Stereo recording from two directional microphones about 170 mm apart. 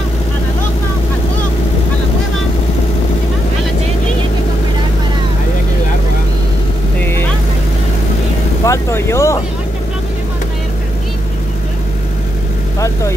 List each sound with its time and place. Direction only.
8.6 s speech: 15° left (ahead or behind)